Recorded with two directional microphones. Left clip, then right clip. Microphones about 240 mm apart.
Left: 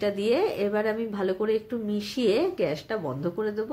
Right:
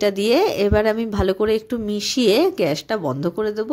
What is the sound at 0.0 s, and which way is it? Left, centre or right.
Speech, right.